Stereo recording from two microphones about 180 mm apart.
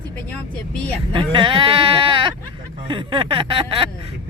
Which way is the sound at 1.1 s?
25° right (ahead or behind).